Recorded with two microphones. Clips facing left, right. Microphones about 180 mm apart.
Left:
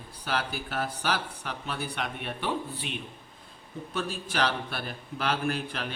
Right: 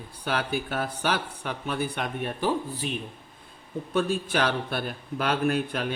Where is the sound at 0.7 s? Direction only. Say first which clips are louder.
Right 3 dB; 55° right (ahead or behind).